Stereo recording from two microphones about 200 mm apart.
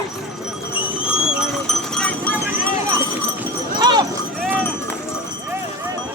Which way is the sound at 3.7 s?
20° right (ahead or behind).